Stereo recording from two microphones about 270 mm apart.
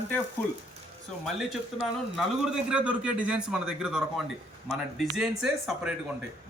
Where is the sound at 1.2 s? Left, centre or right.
Centre.